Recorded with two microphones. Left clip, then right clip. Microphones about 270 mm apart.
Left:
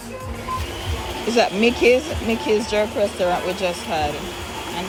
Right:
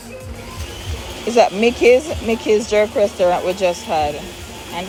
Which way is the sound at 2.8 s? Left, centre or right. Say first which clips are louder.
Right 5 dB; right.